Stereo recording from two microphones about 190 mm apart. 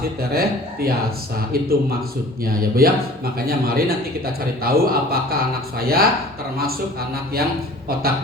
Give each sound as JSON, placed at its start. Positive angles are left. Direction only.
{"t": 0.2, "sound": "a man's voice", "side_deg": -50}